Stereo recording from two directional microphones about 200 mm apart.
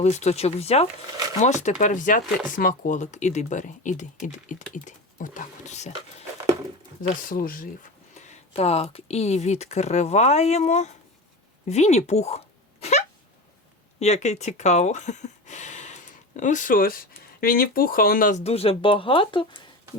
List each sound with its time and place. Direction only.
0.0 s speech: 35° left (ahead or behind)
12.8 s a sound: 35° left (ahead or behind)
14.0 s speech: 35° left (ahead or behind)